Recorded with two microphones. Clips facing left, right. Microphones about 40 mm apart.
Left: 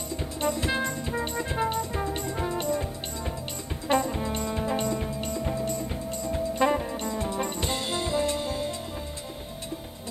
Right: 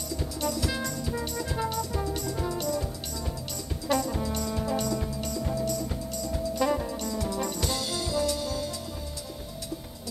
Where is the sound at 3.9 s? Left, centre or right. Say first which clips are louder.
Left 2 dB; left.